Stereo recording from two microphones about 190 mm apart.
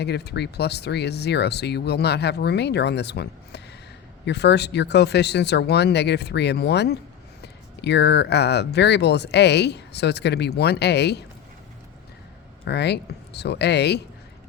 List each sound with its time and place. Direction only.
0.0 s speech: 60° left (ahead or behind)
12.6 s speech: 60° left (ahead or behind)